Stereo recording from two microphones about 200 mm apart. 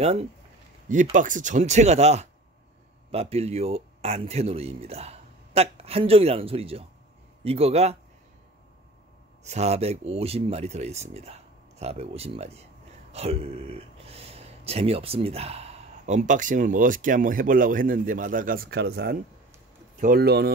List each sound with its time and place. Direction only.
0.0 s speech: 30° right (ahead or behind)
9.4 s speech: 35° right (ahead or behind); by 20.5 s 50° right (ahead or behind)